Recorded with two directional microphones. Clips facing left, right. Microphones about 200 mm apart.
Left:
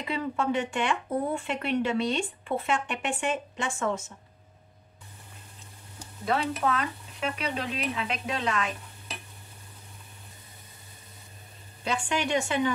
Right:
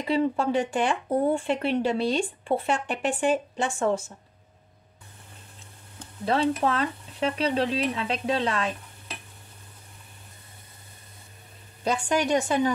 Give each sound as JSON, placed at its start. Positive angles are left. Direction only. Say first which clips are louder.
{"t": 0.0, "sound": "speech", "louder": "right 5 dB", "side_deg": -35}
{"t": 6.2, "sound": "speech", "louder": "right 4 dB", "side_deg": -30}
{"t": 11.8, "sound": "speech", "louder": "right 4 dB", "side_deg": -40}